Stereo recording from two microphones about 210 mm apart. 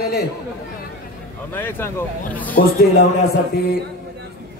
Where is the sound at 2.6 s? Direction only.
45° left (ahead or behind).